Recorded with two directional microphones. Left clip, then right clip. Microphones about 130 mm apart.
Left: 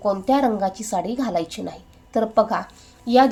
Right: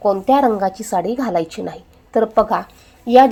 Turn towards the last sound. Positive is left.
turn(degrees=-20)  # may be behind; listen again after turning